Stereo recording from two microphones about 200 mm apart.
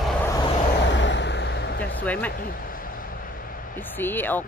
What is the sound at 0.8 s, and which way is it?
Vehicle, 65° left (ahead or behind).